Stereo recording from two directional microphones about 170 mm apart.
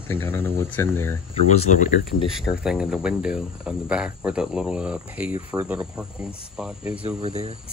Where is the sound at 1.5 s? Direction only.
45° left (ahead or behind).